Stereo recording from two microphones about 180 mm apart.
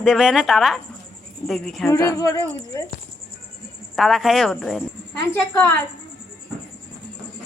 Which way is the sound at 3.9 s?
Centre (ahead or behind).